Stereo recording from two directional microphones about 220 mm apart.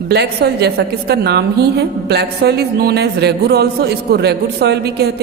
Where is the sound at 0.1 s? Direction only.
50° right (ahead or behind).